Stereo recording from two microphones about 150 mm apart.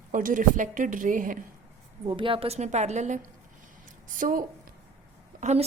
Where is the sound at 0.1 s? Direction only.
65° right (ahead or behind).